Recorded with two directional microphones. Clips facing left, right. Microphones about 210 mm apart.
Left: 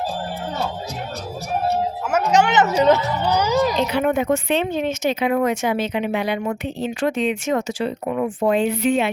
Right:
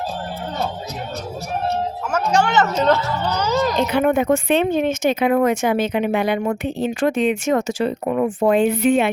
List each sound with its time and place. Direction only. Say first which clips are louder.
2.1 s speech: left 1 dB; 20° left (ahead or behind)
3.8 s speech: right 2 dB; 50° right (ahead or behind)